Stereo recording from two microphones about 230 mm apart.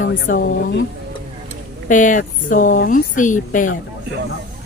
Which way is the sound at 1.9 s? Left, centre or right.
Left.